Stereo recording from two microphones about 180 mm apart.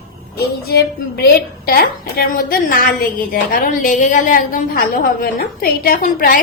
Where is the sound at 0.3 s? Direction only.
60° left (ahead or behind).